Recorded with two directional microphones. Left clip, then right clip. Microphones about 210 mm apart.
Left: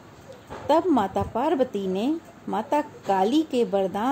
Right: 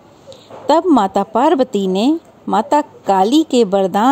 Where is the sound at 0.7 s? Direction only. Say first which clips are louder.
Right 9 dB; 40° right (ahead or behind).